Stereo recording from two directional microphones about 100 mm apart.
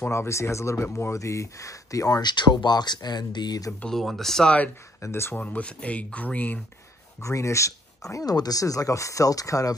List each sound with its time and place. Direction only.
0.0 s speech: 25° left (ahead or behind)
3.8 s speech: 5° left (ahead or behind)
5.0 s speech: 25° left (ahead or behind)
7.2 s speech: 30° left (ahead or behind)